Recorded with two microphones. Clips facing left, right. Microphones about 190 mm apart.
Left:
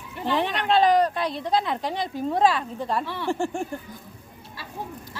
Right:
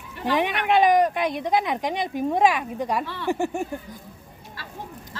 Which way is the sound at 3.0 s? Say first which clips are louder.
Left 1 dB; 15° left (ahead or behind).